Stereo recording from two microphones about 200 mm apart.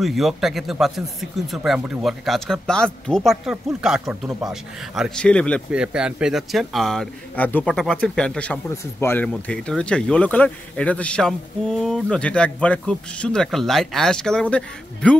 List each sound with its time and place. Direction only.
0.0 s a man's voice: centre (ahead or behind)